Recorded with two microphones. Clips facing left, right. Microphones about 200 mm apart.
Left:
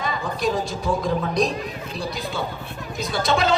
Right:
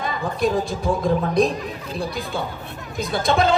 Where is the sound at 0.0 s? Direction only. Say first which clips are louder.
Right 2 dB; 55° right (ahead or behind).